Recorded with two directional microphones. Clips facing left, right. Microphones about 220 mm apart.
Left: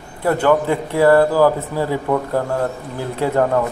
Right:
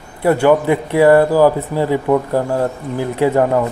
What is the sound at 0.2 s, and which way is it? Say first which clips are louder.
A man's voice: right 3 dB; 15° right (ahead or behind).